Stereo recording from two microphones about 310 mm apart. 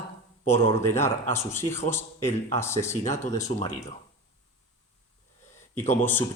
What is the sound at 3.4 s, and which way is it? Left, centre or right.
Speech, centre.